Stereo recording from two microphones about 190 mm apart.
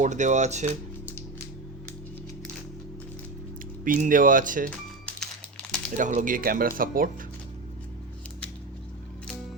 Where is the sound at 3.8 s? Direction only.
45° right (ahead or behind).